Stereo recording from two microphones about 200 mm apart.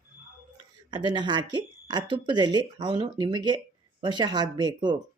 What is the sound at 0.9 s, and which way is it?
Speech, 25° right (ahead or behind).